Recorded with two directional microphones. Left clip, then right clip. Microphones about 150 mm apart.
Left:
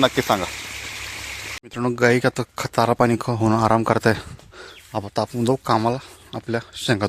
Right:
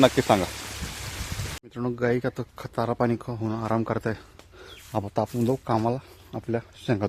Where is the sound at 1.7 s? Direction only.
35° left (ahead or behind); by 4.2 s 55° left (ahead or behind).